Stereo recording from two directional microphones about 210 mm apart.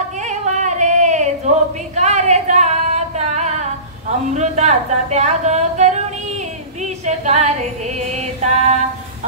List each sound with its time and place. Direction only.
0.3 s a sound: 35° right (ahead or behind)
2.0 s female singing: 35° right (ahead or behind)
4.3 s speech: 35° right (ahead or behind)
6.8 s female singing: 35° right (ahead or behind)
8.1 s speech: 30° right (ahead or behind)